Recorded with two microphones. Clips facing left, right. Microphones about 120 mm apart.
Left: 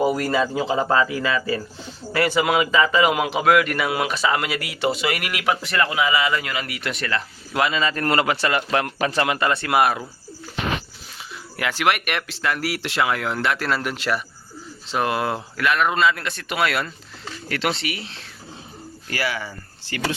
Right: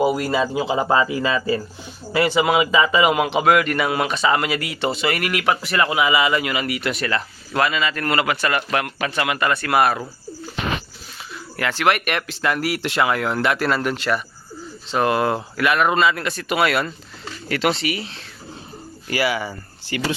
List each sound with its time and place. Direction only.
0.0 s speech: 10° right (ahead or behind); by 1.6 s 25° right (ahead or behind)
2.1 s a man's voice: 15° right (ahead or behind); by 5.5 s 5° left (ahead or behind)
5.6 s speech: 10° right (ahead or behind)
7.7 s a man's voice: 35° left (ahead or behind); by 10.0 s 15° left (ahead or behind)
11.5 s a man's voice: 10° left (ahead or behind)
19.1 s speech: 15° right (ahead or behind)